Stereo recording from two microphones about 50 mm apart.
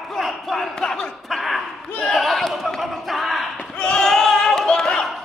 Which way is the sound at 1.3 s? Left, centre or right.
Centre.